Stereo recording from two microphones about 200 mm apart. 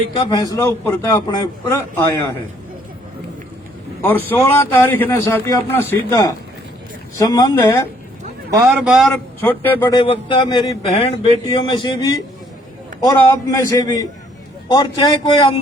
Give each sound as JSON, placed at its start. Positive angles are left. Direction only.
{"t": 0.1, "sound": "a man's voice", "side_deg": 25}
{"t": 4.0, "sound": "a man's voice", "side_deg": 10}
{"t": 8.5, "sound": "a man's voice", "side_deg": -5}
{"t": 10.0, "sound": "a man's voice", "side_deg": 25}